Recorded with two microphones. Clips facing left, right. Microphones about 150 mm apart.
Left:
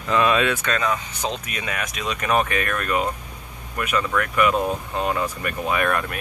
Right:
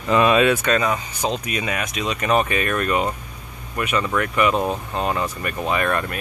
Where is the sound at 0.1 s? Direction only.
10° right (ahead or behind).